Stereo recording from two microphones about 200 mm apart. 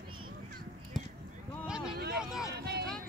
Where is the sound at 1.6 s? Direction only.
5° right (ahead or behind).